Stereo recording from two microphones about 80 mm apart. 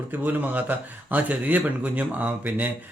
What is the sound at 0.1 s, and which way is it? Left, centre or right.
Speech, right.